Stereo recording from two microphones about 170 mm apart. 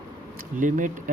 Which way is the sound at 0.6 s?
50° right (ahead or behind).